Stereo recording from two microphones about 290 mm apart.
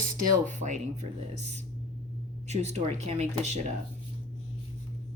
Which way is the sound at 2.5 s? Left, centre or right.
Right.